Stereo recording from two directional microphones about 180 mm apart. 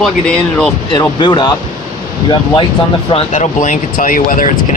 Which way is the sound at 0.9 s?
25° left (ahead or behind).